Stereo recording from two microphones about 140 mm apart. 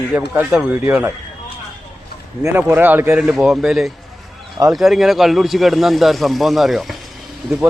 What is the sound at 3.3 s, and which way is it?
Speech, centre (ahead or behind).